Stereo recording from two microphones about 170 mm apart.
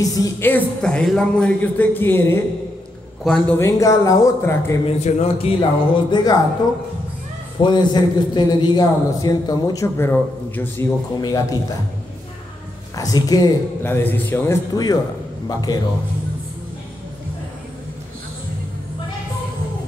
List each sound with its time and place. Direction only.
0.0 s a man's voice: 20° left (ahead or behind)
3.5 s a man's voice: 20° left (ahead or behind)
4.8 s speech: 40° left (ahead or behind)
7.6 s a man's voice: 25° left (ahead or behind)
11.1 s a man's voice: 25° left (ahead or behind)
12.9 s a man's voice: 20° left (ahead or behind)